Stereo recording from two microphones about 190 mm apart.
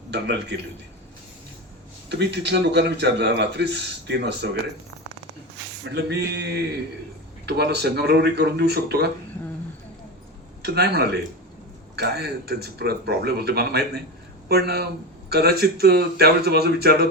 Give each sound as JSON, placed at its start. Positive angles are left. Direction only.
{"t": 0.1, "sound": "a man's voice", "side_deg": -65}
{"t": 2.0, "sound": "a man's voice", "side_deg": -65}
{"t": 5.9, "sound": "a man's voice", "side_deg": -60}
{"t": 10.6, "sound": "a man's voice", "side_deg": -55}